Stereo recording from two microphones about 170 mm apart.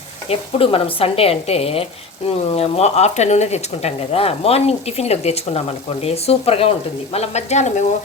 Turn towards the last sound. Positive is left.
turn(degrees=40)  # may be behind; listen again after turning